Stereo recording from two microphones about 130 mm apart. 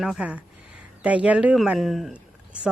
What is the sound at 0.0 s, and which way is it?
Speech, 5° right (ahead or behind).